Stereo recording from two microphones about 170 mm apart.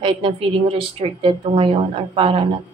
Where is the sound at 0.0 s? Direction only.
30° right (ahead or behind).